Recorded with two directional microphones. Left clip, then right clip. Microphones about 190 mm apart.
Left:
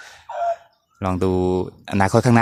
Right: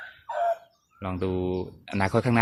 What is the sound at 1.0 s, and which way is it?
Speech, 40° left (ahead or behind).